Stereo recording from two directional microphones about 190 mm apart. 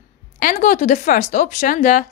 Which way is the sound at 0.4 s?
45° left (ahead or behind).